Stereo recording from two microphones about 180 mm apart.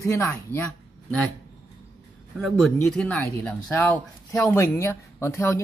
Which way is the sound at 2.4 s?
5° left (ahead or behind).